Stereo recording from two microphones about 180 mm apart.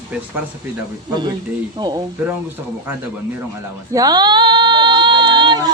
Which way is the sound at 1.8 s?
20° right (ahead or behind).